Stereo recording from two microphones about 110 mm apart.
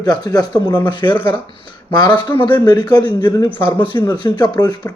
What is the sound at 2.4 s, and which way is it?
A man's voice, 45° left (ahead or behind).